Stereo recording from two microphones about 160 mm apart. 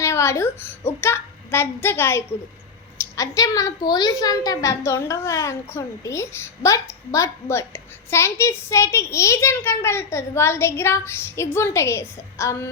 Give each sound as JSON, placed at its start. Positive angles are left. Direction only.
{"t": 0.0, "sound": "a woman's voice", "side_deg": 20}